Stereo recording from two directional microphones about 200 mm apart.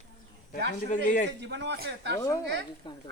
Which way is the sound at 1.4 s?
60° right (ahead or behind).